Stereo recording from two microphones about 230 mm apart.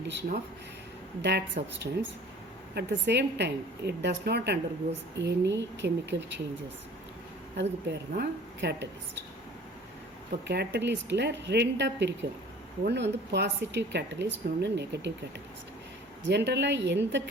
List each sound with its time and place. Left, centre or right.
1.2 s a woman's voice: right
7.5 s a woman's voice: right
10.4 s a woman's voice: right
16.2 s a woman's voice: right